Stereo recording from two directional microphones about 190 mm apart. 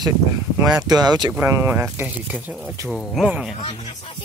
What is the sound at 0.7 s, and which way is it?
Speech, 20° right (ahead or behind).